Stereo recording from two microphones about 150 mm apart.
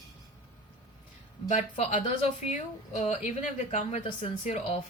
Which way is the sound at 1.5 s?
45° left (ahead or behind).